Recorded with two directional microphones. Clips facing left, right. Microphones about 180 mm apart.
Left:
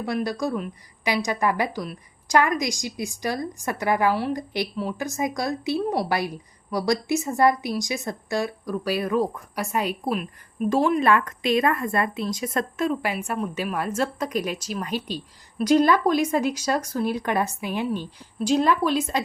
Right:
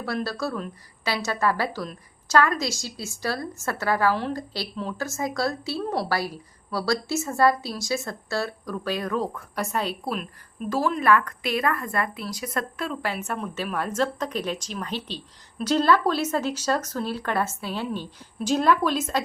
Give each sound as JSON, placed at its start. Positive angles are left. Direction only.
{"t": 0.0, "sound": "a woman's voice", "side_deg": 15}